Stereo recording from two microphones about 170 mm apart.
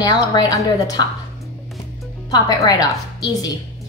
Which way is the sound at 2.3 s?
25° left (ahead or behind).